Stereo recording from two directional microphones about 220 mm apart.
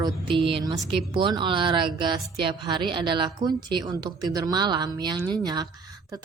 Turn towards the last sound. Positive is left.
turn(degrees=-20)  # may be behind; listen again after turning